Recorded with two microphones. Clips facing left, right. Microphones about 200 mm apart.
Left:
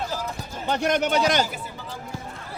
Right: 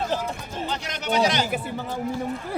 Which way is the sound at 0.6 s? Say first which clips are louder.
Left 8 dB; 55° left (ahead or behind).